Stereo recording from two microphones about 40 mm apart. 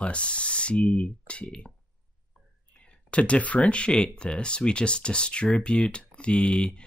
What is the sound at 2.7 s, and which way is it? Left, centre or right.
Speech, left.